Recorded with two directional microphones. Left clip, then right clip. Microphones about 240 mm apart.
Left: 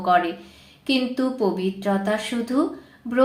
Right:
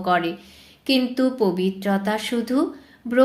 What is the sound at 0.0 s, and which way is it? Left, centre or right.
Speech, right.